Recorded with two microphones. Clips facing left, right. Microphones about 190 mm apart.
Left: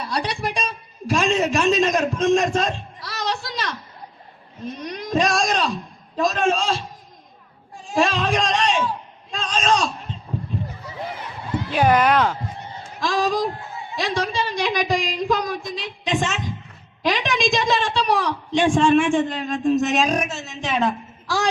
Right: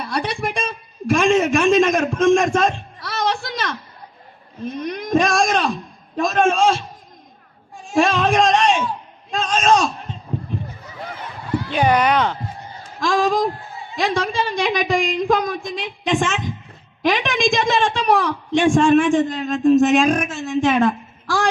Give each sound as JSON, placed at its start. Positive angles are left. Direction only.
{"t": 0.1, "sound": "a sound", "side_deg": -55}
{"t": 4.8, "sound": "a woman's voice", "side_deg": -55}
{"t": 7.9, "sound": "speech", "side_deg": -50}
{"t": 9.3, "sound": "a sound", "side_deg": -45}
{"t": 11.7, "sound": "speech", "side_deg": 0}
{"t": 13.0, "sound": "a woman's voice", "side_deg": -50}